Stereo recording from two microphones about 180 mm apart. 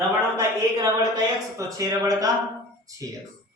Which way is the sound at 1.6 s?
20° right (ahead or behind).